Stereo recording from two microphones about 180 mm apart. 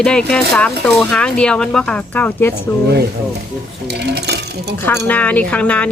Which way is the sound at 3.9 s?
65° right (ahead or behind).